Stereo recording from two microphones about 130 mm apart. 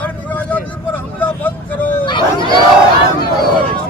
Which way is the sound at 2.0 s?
35° left (ahead or behind).